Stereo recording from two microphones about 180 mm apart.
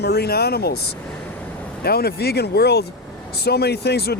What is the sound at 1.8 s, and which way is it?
Speech, 60° left (ahead or behind).